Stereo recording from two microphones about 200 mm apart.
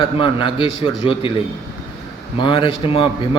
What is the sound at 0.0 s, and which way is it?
A man's voice, 25° left (ahead or behind).